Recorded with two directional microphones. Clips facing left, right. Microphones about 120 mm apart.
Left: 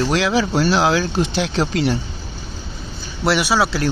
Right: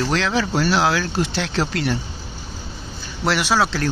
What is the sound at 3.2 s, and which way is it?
Speech, 10° left (ahead or behind).